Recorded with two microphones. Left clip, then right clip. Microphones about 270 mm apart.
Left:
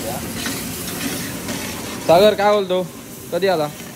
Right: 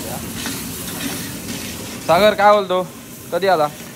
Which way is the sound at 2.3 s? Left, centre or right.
Right.